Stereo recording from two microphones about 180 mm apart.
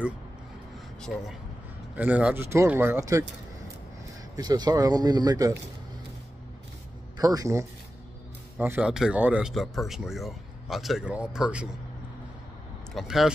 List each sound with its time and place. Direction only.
1.1 s speech: centre (ahead or behind); by 3.3 s 15° right (ahead or behind)
4.4 s speech: 20° right (ahead or behind)
7.2 s speech: 20° right (ahead or behind)
12.9 s speech: centre (ahead or behind)